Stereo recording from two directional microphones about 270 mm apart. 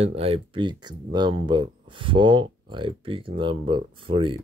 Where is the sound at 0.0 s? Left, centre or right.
Right.